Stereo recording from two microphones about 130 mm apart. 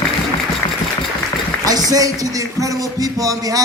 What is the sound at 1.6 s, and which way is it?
Speech, 30° right (ahead or behind).